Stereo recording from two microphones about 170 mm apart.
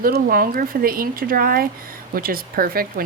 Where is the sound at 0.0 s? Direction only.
55° right (ahead or behind).